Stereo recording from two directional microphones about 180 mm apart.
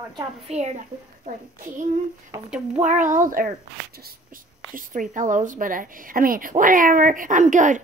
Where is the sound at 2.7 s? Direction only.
40° right (ahead or behind).